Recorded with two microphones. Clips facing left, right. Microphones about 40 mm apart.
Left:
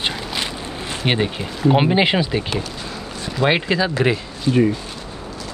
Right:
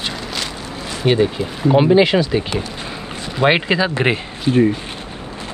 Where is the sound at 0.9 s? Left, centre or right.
Left.